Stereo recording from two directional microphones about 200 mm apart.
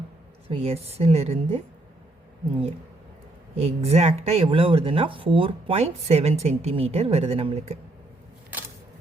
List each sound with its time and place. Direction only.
0.5 s speech: 30° right (ahead or behind)
3.5 s speech: 30° right (ahead or behind)